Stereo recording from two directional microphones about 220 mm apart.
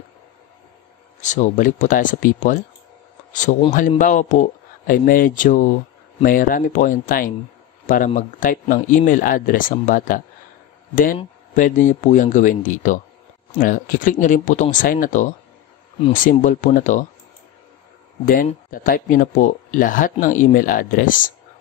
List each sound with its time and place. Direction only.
1.2 s speech: 35° left (ahead or behind)
18.2 s speech: 40° left (ahead or behind)